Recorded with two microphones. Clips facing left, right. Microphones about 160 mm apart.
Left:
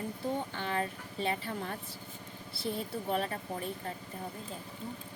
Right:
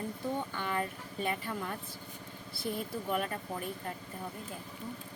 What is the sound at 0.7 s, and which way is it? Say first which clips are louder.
Speech: left 1 dB; 30° left (ahead or behind).